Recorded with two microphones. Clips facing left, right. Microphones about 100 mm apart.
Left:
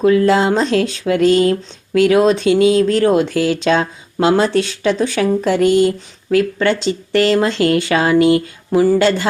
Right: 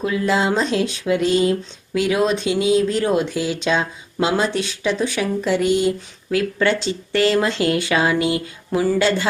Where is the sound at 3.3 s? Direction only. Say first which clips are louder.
Left 7 dB; 90° left.